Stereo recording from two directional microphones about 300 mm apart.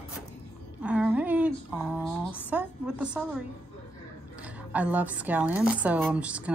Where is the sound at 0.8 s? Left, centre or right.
Centre.